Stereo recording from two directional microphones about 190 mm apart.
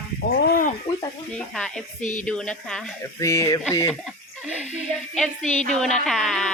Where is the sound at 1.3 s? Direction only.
5° left (ahead or behind).